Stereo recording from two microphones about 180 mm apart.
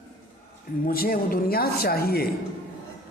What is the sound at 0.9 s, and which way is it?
Speech, 55° left (ahead or behind).